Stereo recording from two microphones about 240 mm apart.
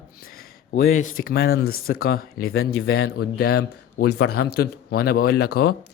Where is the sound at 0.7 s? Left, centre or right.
Left.